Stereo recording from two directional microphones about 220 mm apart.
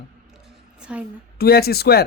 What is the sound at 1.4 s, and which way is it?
Speech, 45° left (ahead or behind).